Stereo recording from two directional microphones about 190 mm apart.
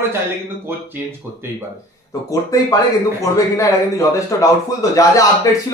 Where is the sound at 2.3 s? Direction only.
20° left (ahead or behind).